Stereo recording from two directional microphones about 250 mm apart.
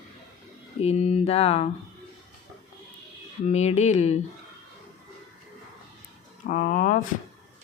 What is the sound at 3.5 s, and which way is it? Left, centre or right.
Speech, left.